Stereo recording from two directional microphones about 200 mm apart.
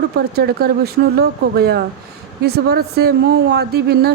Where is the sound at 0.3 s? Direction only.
50° right (ahead or behind).